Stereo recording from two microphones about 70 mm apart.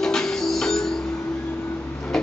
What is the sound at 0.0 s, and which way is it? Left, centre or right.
Music, centre.